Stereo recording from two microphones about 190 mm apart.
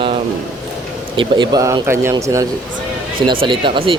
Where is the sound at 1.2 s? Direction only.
20° right (ahead or behind).